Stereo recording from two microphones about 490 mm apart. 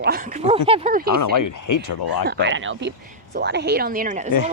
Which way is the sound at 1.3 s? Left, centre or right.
Left.